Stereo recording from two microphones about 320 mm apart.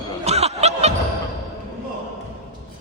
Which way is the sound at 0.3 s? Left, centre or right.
Centre.